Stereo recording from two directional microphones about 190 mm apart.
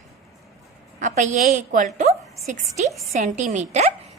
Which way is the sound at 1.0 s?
40° right (ahead or behind).